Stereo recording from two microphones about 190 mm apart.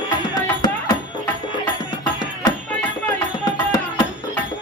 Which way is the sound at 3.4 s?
20° left (ahead or behind).